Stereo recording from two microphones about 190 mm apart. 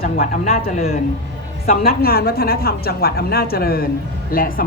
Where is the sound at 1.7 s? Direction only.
55° left (ahead or behind).